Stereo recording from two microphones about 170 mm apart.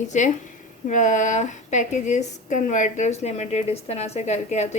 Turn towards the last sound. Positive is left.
turn(degrees=40)  # may be behind; listen again after turning